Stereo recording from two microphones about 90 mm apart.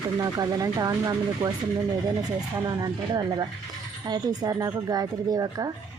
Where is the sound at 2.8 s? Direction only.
50° right (ahead or behind).